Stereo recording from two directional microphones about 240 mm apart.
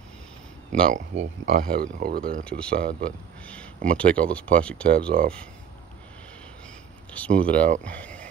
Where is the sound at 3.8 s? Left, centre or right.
Centre.